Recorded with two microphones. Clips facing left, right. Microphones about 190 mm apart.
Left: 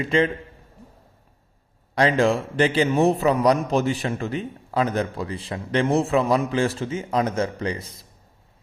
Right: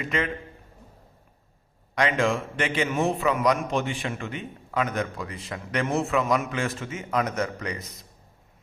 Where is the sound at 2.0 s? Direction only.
35° left (ahead or behind).